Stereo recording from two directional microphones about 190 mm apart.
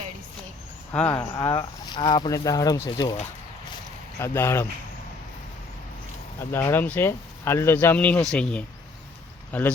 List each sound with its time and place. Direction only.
0.9 s speech: 10° left (ahead or behind)
4.2 s speech: 15° left (ahead or behind)
6.4 s speech: 10° left (ahead or behind)